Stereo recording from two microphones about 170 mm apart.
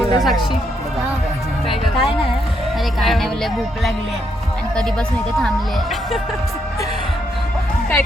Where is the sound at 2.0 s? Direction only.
35° left (ahead or behind).